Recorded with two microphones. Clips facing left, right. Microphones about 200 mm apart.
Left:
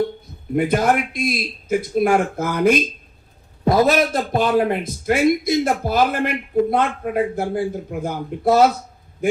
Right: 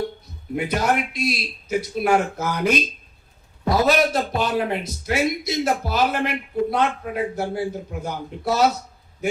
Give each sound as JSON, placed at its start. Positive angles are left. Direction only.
{"t": 0.5, "sound": "speech", "side_deg": 50}